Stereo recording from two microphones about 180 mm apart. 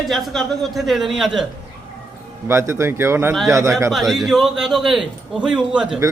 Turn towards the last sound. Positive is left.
turn(degrees=-20)  # may be behind; listen again after turning